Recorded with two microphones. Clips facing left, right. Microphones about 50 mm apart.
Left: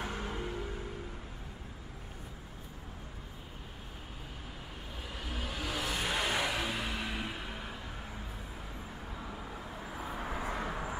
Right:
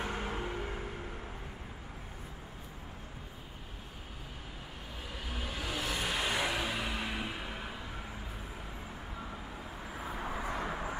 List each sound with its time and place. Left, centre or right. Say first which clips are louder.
0.2 s vehicle: right 1 dB; right
5.3 s vehicle: left 1 dB; centre
9.6 s vehicle: left 1 dB; centre